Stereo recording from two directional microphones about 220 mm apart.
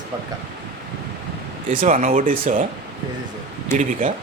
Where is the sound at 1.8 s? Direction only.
35° right (ahead or behind).